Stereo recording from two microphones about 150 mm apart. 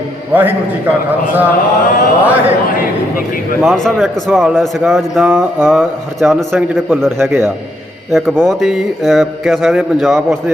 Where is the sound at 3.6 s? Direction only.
Centre (ahead or behind).